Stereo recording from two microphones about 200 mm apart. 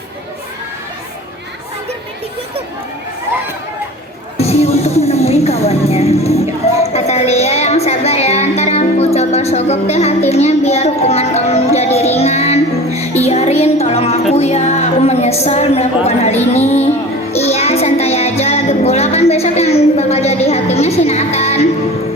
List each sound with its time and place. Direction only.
4.4 s speech: 30° left (ahead or behind)
17.3 s music: 30° left (ahead or behind)